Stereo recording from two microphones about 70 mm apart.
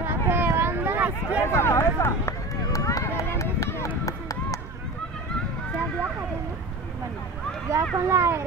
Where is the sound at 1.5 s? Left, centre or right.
Left.